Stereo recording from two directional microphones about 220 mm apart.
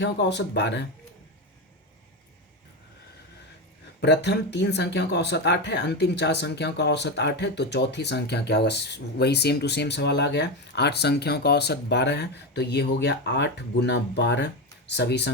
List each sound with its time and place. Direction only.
0.0 s speech: 50° left (ahead or behind)
4.0 s speech: 50° left (ahead or behind)